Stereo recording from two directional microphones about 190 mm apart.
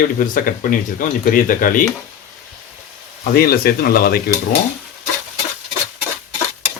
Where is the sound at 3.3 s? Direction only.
55° left (ahead or behind).